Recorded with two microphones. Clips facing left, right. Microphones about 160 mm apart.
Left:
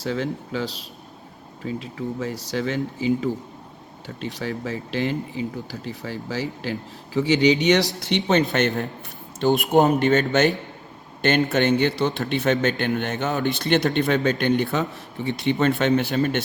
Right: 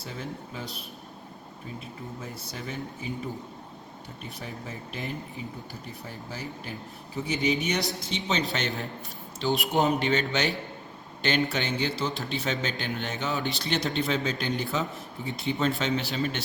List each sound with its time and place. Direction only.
0.0 s speech: 90° left; by 8.4 s 60° left (ahead or behind)
8.5 s a man's voice: 50° left (ahead or behind); by 15.7 s 70° left (ahead or behind)
15.8 s speech: 55° left (ahead or behind)